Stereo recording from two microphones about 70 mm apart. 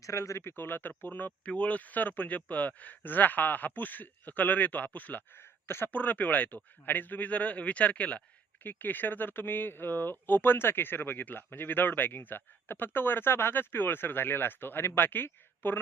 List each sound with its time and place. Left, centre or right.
0.0 s speech: left